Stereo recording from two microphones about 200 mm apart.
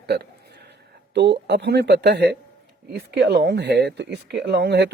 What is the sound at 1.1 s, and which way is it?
Speech, 60° right (ahead or behind).